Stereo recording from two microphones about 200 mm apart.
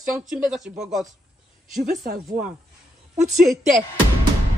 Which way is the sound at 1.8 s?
45° right (ahead or behind).